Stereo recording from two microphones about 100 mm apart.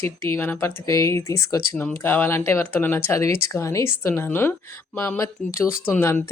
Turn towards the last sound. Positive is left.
turn(degrees=20)  # may be behind; listen again after turning